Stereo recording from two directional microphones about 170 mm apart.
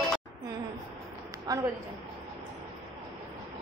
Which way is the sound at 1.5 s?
20° right (ahead or behind).